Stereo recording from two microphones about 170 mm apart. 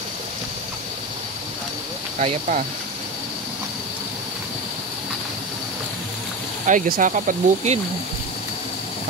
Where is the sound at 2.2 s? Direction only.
50° right (ahead or behind).